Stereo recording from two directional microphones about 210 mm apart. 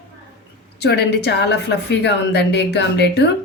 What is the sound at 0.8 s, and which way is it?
A woman's voice, 50° left (ahead or behind).